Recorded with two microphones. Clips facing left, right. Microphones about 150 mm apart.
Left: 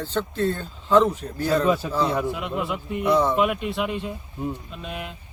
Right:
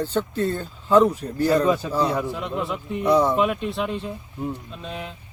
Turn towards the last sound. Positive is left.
turn(degrees=5)  # may be behind; listen again after turning